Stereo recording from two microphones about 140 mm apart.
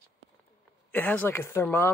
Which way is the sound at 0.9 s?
15° left (ahead or behind).